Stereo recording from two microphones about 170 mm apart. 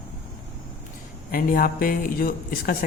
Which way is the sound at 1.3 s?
55° left (ahead or behind).